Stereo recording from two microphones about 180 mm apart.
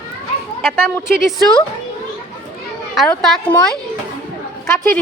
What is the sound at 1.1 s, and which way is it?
Speech, centre (ahead or behind).